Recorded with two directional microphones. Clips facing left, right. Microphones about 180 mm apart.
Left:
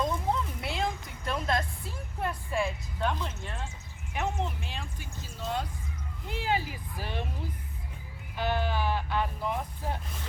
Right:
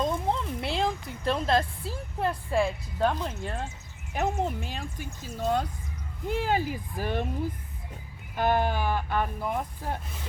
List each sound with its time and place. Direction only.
0.0 s a sound: 25° right (ahead or behind)
4.1 s speech: 40° right (ahead or behind)
8.4 s speech: 50° right (ahead or behind)